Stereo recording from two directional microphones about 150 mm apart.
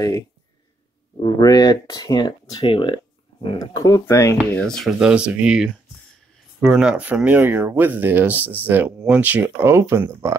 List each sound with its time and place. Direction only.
1.2 s speech: 25° left (ahead or behind)
3.5 s speech: 25° left (ahead or behind)
4.6 s speech: 5° left (ahead or behind); by 10.3 s 15° right (ahead or behind)